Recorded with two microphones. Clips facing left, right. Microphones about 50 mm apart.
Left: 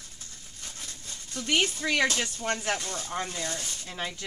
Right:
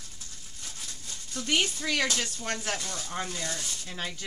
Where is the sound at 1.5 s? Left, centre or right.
Centre.